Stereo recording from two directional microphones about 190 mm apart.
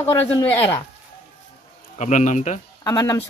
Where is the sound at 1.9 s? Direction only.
40° left (ahead or behind).